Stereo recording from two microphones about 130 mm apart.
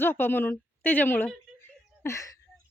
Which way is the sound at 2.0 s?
25° left (ahead or behind).